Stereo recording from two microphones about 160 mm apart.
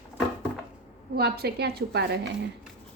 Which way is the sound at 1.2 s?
80° right.